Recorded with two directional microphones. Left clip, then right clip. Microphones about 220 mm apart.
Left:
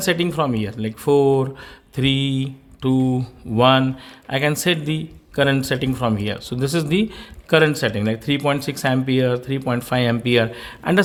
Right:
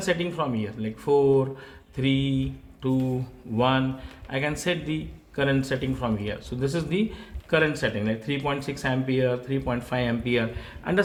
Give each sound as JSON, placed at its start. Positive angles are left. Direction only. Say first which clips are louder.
{"t": 0.0, "sound": "speech", "louder": "left 6 dB", "side_deg": 50}